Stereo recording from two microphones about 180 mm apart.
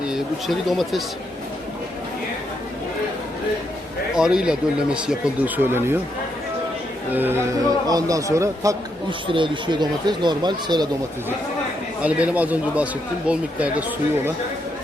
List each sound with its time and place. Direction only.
0.0 s speech: centre (ahead or behind)
4.1 s speech: 5° right (ahead or behind)
7.1 s speech: 10° right (ahead or behind)
12.0 s speech: 10° right (ahead or behind)